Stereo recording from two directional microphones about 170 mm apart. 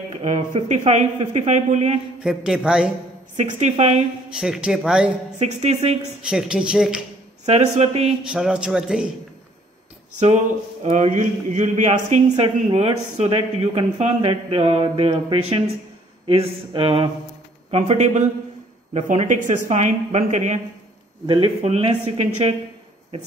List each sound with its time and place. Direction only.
0.1 s a sound: 40° right (ahead or behind)
0.5 s a man's voice: 45° right (ahead or behind)
2.2 s speech: 5° right (ahead or behind)
3.3 s a man's voice: 45° right (ahead or behind)
4.3 s speech: 5° right (ahead or behind)
5.4 s speech: 40° right (ahead or behind)
6.2 s speech: 5° right (ahead or behind)
7.4 s speech: 40° right (ahead or behind)
8.3 s speech: 5° right (ahead or behind)
10.2 s a man's voice: 40° right (ahead or behind)
21.3 s speech: 35° right (ahead or behind)